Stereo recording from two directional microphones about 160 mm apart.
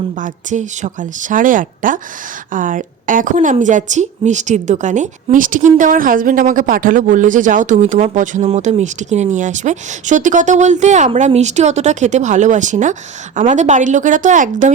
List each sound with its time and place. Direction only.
0.2 s a woman's voice: 50° right (ahead or behind)